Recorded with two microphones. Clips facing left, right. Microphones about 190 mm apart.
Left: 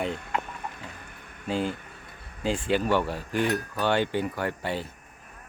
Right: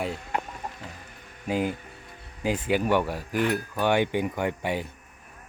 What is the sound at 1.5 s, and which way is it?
Speech, 10° right (ahead or behind).